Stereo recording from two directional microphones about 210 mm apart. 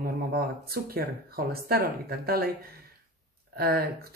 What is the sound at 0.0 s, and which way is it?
Speech, 45° right (ahead or behind).